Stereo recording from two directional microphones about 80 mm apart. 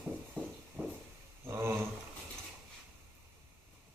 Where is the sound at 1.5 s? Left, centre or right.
Right.